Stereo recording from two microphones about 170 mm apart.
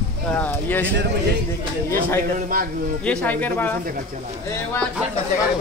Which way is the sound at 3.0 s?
10° left (ahead or behind).